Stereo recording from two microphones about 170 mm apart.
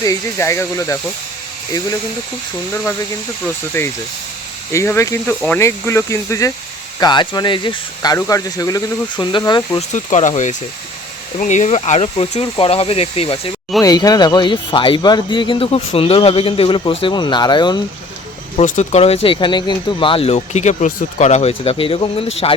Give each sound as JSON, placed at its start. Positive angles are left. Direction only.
{"t": 0.0, "sound": "speech", "side_deg": 20}
{"t": 3.8, "sound": "speech", "side_deg": 15}
{"t": 9.9, "sound": "speech", "side_deg": 45}
{"t": 13.8, "sound": "speech", "side_deg": 20}
{"t": 18.5, "sound": "speech", "side_deg": 45}